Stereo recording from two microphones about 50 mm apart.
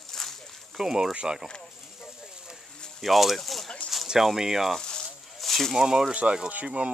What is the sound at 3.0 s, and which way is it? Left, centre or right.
Speech, centre.